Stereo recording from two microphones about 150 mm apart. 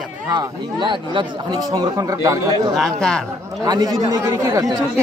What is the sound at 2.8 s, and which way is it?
Speech, 5° left (ahead or behind).